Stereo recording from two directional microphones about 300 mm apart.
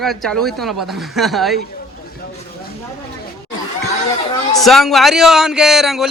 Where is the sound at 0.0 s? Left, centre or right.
Centre.